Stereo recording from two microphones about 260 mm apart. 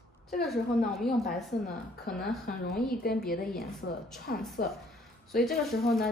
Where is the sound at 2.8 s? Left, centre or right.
Left.